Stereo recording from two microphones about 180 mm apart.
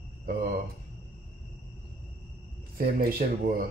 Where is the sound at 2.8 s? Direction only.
60° right (ahead or behind).